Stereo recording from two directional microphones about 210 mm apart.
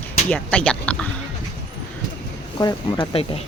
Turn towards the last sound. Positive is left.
turn(degrees=25)  # may be behind; listen again after turning